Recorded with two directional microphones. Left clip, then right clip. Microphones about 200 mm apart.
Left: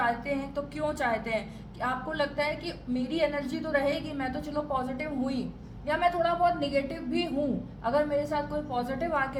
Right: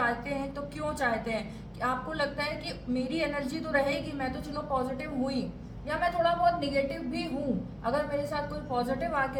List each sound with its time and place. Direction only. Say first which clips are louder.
0.0 s a woman's voice: left 1 dB; 30° left (ahead or behind)